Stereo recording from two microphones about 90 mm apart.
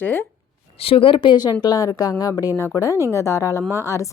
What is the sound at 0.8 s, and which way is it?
A woman's voice, 85° left.